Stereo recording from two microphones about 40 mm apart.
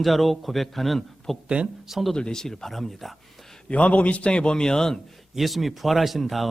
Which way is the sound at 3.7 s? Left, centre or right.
Left.